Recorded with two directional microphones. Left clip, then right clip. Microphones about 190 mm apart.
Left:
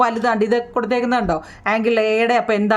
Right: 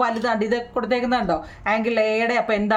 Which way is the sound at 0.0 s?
30° left (ahead or behind).